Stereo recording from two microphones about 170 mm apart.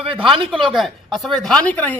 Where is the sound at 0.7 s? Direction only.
Centre (ahead or behind).